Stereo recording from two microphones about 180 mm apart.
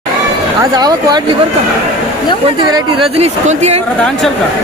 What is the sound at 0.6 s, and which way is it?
Speech, 20° right (ahead or behind).